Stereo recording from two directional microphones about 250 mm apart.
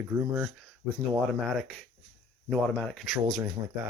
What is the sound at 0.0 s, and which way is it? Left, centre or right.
Speech, centre.